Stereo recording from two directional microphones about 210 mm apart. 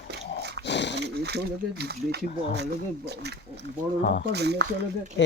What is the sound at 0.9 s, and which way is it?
Roaring cats, 50° right (ahead or behind).